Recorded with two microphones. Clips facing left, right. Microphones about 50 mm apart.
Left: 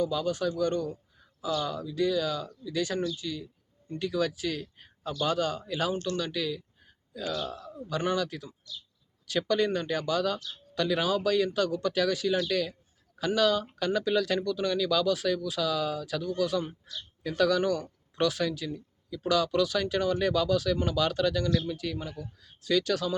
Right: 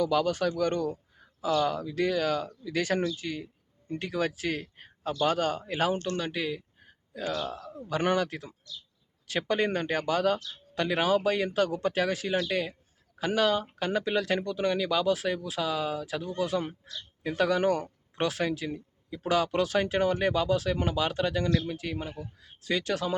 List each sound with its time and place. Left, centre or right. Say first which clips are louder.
0.0 s speech: right 2 dB; right